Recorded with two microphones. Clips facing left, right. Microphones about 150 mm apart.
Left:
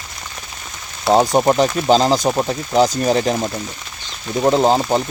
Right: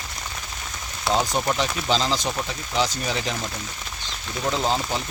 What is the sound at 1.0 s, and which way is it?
Speech, 45° left (ahead or behind).